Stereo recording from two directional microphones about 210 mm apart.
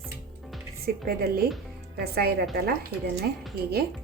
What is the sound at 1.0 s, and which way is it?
Speech, 45° right (ahead or behind).